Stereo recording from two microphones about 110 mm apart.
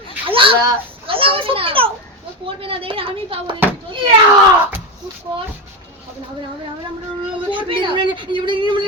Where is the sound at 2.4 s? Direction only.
55° right (ahead or behind).